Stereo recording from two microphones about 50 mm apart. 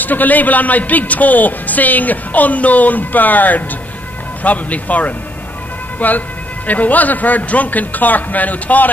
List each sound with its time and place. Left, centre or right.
0.0 s a man's voice: left